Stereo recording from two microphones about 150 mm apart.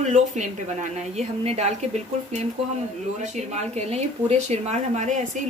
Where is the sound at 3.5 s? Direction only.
45° right (ahead or behind).